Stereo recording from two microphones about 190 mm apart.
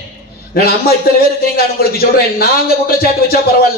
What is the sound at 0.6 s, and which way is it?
A man's voice, 55° left (ahead or behind).